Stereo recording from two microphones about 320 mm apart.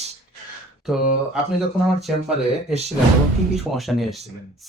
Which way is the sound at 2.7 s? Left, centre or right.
Centre.